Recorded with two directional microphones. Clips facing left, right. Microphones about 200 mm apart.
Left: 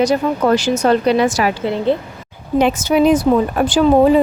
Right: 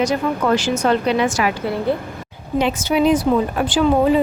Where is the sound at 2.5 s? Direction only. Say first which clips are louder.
Left 4 dB; 45° left (ahead or behind).